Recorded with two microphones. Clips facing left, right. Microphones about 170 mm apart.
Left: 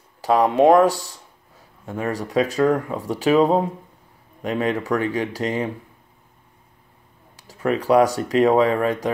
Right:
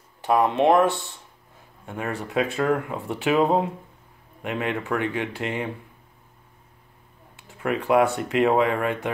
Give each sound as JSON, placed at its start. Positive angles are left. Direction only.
{"t": 0.4, "sound": "speech", "side_deg": 40}
{"t": 7.4, "sound": "speech", "side_deg": 35}